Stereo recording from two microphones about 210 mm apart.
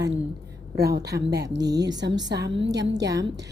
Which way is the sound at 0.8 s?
50° right (ahead or behind).